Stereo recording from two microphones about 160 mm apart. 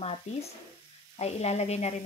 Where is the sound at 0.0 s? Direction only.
40° left (ahead or behind).